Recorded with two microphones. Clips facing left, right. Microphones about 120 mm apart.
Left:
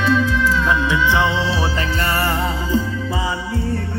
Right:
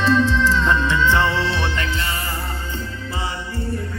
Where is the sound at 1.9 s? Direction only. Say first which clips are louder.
Left 7 dB; 55° left (ahead or behind); by 2.5 s 80° left.